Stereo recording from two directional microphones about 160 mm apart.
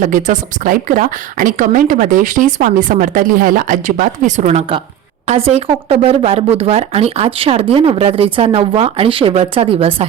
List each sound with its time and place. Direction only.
0.0 s a woman's voice: 50° right (ahead or behind)